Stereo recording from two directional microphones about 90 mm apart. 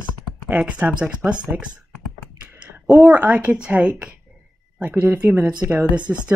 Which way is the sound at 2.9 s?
Centre (ahead or behind).